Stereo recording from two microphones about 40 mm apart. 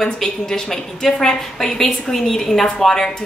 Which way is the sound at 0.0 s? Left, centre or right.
Centre.